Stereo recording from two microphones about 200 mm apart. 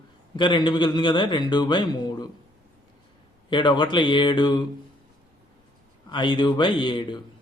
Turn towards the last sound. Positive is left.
turn(degrees=25)  # may be behind; listen again after turning